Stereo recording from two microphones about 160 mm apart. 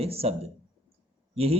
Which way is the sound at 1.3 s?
40° right (ahead or behind).